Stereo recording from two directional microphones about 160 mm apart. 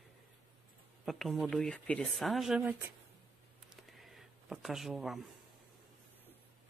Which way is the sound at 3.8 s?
Centre (ahead or behind).